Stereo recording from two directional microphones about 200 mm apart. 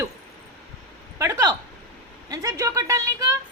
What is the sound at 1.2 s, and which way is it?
Speech, 15° right (ahead or behind).